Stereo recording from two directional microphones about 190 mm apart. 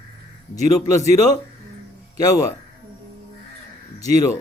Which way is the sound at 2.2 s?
15° left (ahead or behind).